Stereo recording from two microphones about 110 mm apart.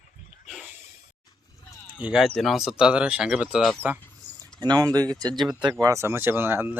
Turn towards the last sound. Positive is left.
turn(degrees=-15)  # may be behind; listen again after turning